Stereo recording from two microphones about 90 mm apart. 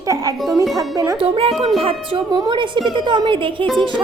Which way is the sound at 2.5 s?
65° right (ahead or behind).